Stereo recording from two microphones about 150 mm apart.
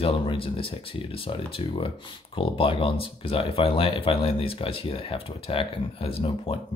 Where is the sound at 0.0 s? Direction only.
35° left (ahead or behind).